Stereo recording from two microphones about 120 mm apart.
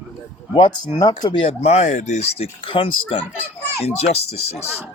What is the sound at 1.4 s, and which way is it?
Speech, 65° left (ahead or behind).